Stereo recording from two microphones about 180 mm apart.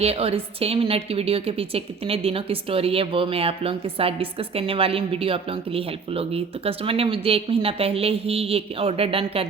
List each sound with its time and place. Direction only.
0.0 s a woman's voice: 35° right (ahead or behind)